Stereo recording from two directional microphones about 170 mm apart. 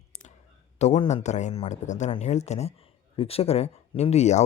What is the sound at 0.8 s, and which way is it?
Speech, 40° left (ahead or behind).